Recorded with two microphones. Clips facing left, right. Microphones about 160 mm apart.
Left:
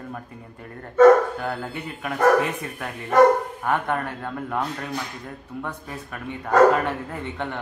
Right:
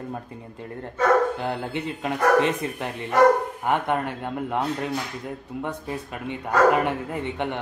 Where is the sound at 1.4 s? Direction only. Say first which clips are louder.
Right 2 dB; 20° right (ahead or behind).